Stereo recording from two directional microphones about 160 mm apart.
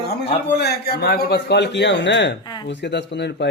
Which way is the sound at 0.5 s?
90° left.